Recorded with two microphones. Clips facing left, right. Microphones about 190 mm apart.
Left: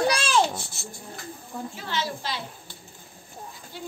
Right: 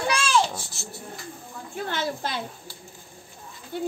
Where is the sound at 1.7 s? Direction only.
50° right (ahead or behind).